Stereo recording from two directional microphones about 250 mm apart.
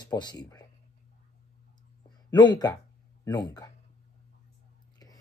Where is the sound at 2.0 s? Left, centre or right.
Centre.